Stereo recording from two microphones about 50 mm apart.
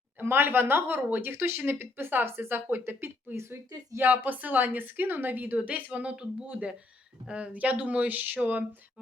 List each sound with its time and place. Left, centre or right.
0.2 s speech: right
3.3 s speech: right
4.0 s a woman's voice: right
5.6 s a woman's voice: right